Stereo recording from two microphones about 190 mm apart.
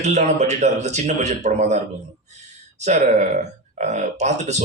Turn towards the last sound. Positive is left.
turn(degrees=-35)  # may be behind; listen again after turning